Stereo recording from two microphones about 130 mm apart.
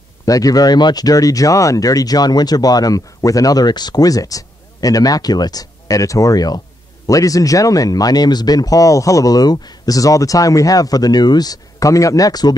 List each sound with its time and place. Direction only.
0.2 s speech: 25° left (ahead or behind)